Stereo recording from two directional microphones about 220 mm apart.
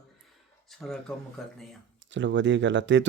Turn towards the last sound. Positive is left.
turn(degrees=-55)  # may be behind; listen again after turning